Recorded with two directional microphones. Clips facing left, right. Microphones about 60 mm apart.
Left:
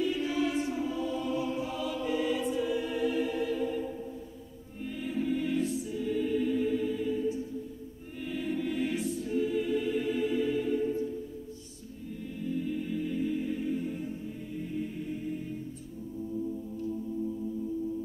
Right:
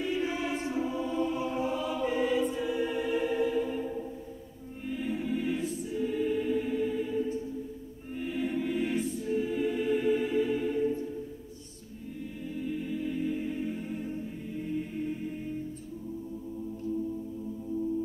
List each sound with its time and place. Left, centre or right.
0.0 s choir: right
4.8 s choir: centre
8.1 s music: centre
12.4 s music: centre